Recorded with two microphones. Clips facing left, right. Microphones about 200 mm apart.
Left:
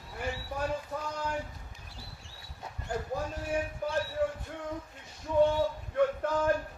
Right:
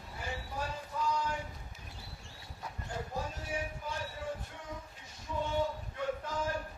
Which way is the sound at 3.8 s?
60° left (ahead or behind).